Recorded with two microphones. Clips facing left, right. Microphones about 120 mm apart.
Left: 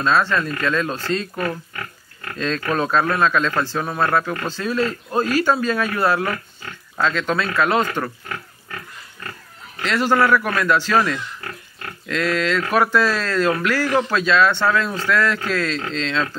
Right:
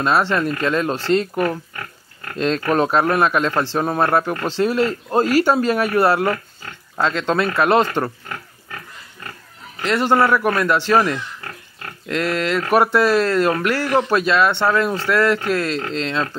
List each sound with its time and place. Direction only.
0.0 s a man's voice: 25° right (ahead or behind)
3.7 s speech: 30° right (ahead or behind)
4.0 s speech: 20° right (ahead or behind)
9.8 s a man's voice: 20° right (ahead or behind)